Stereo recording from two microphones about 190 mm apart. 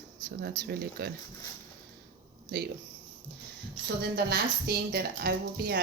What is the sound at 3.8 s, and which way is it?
A woman's voice, 55° right (ahead or behind).